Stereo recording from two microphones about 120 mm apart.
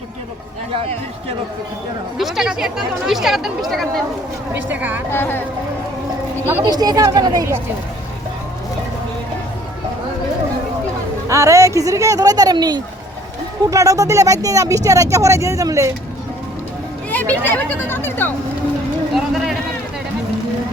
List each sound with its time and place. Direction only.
2.1 s speech: centre (ahead or behind)
4.7 s a woman's voice: 15° right (ahead or behind)
5.1 s speech: 15° left (ahead or behind)
6.6 s a woman's voice: 35° right (ahead or behind)
11.3 s speech: 25° right (ahead or behind)
17.1 s speech: 15° left (ahead or behind)
19.1 s run: centre (ahead or behind)